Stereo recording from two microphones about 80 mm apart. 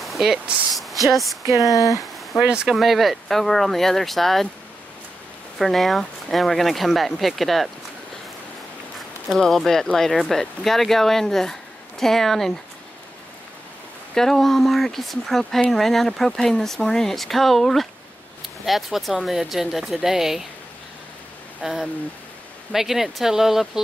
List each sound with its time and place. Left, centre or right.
0.0 s a sound: centre
1.0 s speech: centre
1.6 s speech: left
2.4 s speech: centre
5.6 s speech: centre
9.4 s speech: centre
14.1 s speech: centre
21.5 s speech: centre